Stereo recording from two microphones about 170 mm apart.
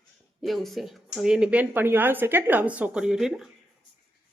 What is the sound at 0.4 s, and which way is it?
Speech, centre (ahead or behind).